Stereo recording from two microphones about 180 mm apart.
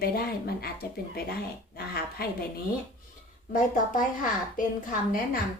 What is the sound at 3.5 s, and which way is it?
Speech, 50° left (ahead or behind).